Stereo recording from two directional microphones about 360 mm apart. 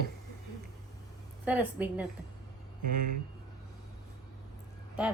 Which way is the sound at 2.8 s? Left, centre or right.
Right.